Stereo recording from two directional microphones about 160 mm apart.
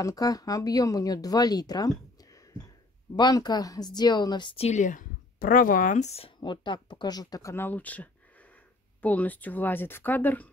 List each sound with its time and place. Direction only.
0.0 s speech: 25° left (ahead or behind)
4.6 s speech: 50° left (ahead or behind); by 10.5 s 10° left (ahead or behind)